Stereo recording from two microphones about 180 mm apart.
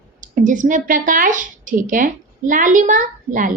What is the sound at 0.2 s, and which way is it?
A woman's voice, 45° right (ahead or behind).